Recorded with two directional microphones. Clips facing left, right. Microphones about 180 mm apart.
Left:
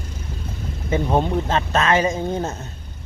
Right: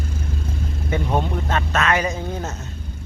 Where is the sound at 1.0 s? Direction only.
25° left (ahead or behind).